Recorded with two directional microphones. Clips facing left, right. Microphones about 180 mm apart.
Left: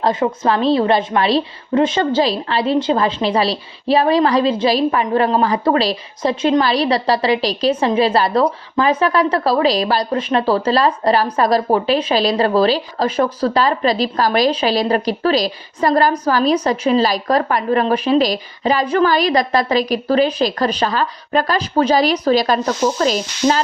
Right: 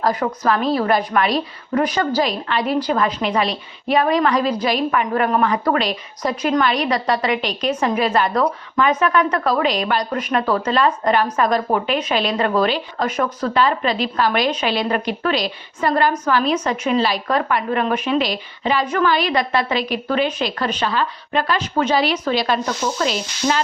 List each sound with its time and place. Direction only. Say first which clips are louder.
0.0 s a woman's voice: left 3 dB; 25° left (ahead or behind)